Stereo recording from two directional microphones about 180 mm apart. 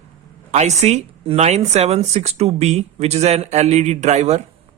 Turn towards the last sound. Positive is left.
turn(degrees=-40)  # may be behind; listen again after turning